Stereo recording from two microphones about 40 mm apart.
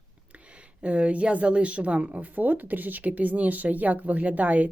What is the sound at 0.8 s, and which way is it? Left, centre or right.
Speech, right.